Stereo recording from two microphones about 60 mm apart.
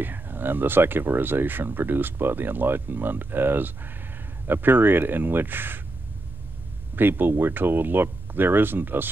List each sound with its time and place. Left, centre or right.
0.0 s speech: right
7.0 s speech: right